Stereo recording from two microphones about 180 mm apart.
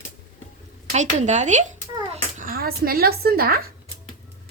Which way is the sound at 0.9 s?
40° right (ahead or behind).